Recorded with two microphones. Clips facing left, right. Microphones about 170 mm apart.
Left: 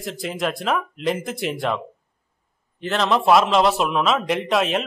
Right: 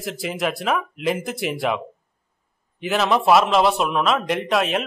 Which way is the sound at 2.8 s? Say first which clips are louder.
Right 1 dB; 5° right (ahead or behind).